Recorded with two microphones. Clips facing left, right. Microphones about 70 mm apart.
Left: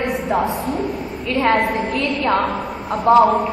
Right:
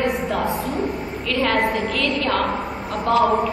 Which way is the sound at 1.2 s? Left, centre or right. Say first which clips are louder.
Left 4 dB; left.